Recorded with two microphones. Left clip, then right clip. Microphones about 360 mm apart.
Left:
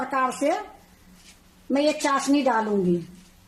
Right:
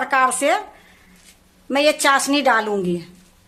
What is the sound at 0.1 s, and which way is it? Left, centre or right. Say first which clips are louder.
Speech: right 7 dB; right.